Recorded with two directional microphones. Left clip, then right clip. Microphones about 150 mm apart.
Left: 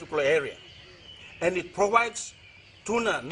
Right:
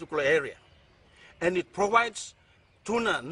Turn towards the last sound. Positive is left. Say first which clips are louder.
# left 1 dB
turn(degrees=15)  # may be behind; listen again after turning